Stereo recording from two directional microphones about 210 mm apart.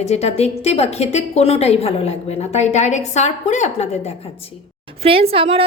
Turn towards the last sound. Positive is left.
turn(degrees=-25)  # may be behind; listen again after turning